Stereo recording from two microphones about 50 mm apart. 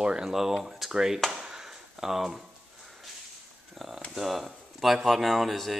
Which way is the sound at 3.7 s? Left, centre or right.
Centre.